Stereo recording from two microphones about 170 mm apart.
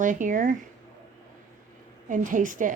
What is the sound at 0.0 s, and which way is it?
Speech, 50° right (ahead or behind).